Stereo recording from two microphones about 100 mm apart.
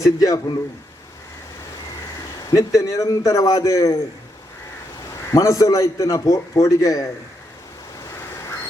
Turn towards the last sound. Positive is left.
turn(degrees=35)  # may be behind; listen again after turning